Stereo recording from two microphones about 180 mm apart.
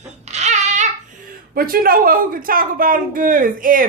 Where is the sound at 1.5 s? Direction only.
55° right (ahead or behind).